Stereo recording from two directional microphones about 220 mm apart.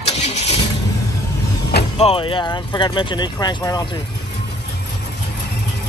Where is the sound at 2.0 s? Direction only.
25° left (ahead or behind).